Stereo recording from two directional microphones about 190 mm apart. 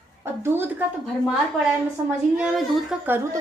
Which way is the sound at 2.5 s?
5° right (ahead or behind).